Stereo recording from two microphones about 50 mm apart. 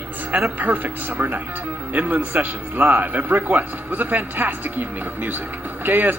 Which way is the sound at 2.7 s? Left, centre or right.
Right.